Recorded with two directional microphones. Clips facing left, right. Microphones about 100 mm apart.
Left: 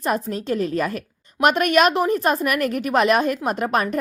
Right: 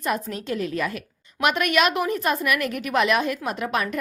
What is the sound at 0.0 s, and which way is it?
A woman's voice, 35° left (ahead or behind).